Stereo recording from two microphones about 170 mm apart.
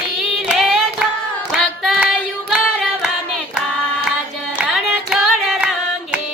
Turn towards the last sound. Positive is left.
turn(degrees=-5)  # may be behind; listen again after turning